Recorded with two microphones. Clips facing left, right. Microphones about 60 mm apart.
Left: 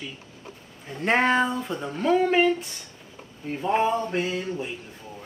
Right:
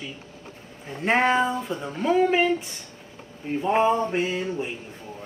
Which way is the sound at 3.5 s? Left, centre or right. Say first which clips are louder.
Right 2 dB; centre.